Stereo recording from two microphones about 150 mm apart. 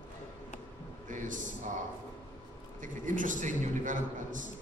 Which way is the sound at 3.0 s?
60° right (ahead or behind).